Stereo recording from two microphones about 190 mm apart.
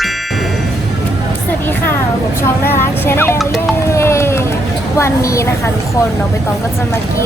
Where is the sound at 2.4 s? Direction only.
10° left (ahead or behind).